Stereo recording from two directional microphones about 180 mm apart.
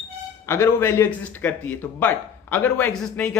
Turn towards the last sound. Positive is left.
turn(degrees=5)  # may be behind; listen again after turning